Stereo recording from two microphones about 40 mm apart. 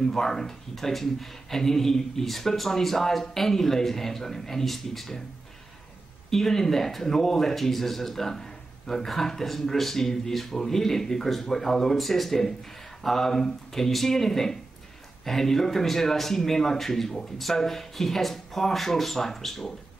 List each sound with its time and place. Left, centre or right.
0.0 s speech: centre
6.3 s speech: centre